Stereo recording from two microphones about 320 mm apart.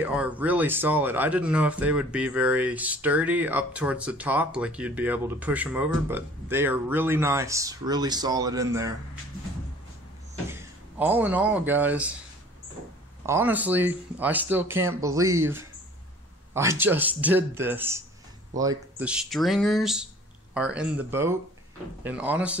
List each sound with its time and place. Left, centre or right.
0.0 s speech: centre
10.5 s speech: centre
13.2 s speech: centre